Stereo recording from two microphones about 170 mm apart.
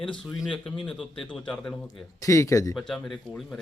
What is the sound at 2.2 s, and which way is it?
Speech, 20° left (ahead or behind).